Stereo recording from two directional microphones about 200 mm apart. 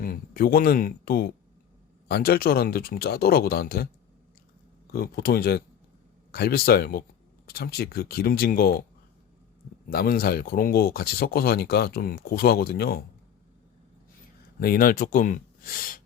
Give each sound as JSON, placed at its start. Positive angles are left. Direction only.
{"t": 0.0, "sound": "speech", "side_deg": 45}
{"t": 4.9, "sound": "speech", "side_deg": 50}
{"t": 9.9, "sound": "speech", "side_deg": 50}
{"t": 14.6, "sound": "speech", "side_deg": 45}